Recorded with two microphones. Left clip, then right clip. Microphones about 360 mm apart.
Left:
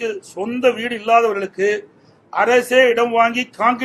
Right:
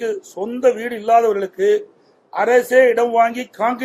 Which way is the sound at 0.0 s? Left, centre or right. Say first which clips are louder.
Right 1 dB; left.